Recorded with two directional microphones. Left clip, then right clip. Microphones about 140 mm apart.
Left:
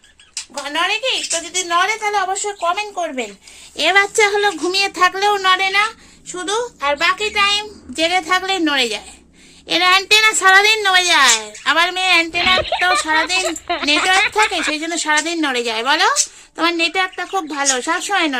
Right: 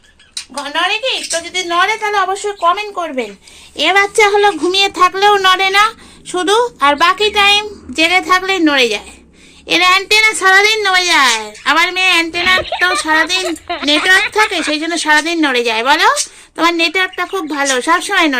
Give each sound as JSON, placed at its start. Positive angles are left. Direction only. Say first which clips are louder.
{"t": 0.6, "sound": "a woman's voice", "louder": "right 3 dB", "side_deg": 5}
{"t": 5.4, "sound": "speech", "louder": "right 5 dB", "side_deg": -20}
{"t": 6.2, "sound": "a woman's voice", "louder": "right 9 dB", "side_deg": -45}
{"t": 7.4, "sound": "a woman's voice", "louder": "right 6 dB", "side_deg": -15}